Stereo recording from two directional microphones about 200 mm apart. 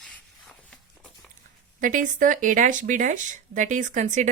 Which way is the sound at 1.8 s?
40° right (ahead or behind).